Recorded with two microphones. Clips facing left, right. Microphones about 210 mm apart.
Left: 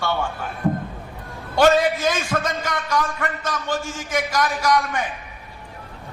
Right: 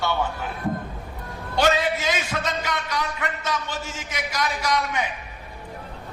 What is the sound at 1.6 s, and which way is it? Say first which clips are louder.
A man's voice: left 5 dB; 45° left (ahead or behind).